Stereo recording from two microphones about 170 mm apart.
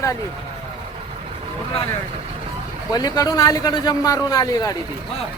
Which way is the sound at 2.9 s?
20° left (ahead or behind).